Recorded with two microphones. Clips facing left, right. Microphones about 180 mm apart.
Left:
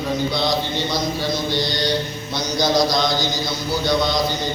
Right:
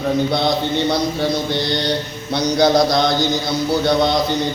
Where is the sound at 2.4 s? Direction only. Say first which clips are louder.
Right 5 dB; 60° right (ahead or behind).